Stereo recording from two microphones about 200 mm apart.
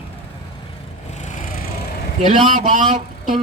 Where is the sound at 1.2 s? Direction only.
35° left (ahead or behind).